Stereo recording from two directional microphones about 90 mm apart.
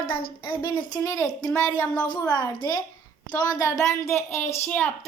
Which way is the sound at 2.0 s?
50° left (ahead or behind).